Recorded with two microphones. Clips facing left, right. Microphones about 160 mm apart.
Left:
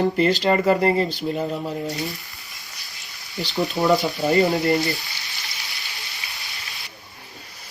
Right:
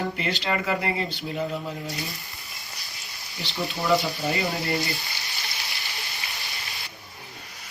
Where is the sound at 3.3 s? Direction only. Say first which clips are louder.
Left 8 dB; 40° left (ahead or behind).